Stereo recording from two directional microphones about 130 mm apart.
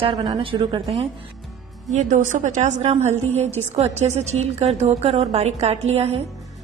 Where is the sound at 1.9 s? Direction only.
65° right (ahead or behind).